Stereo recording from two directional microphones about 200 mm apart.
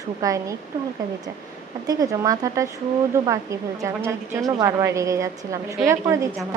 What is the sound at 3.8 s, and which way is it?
Speech, 10° right (ahead or behind).